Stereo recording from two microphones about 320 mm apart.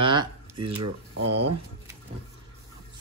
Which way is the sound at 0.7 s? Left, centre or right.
Right.